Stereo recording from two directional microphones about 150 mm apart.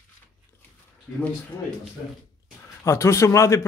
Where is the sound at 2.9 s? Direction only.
20° left (ahead or behind).